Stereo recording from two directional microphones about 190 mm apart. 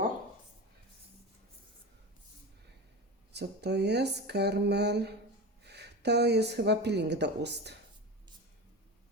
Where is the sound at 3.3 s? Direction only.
60° right (ahead or behind).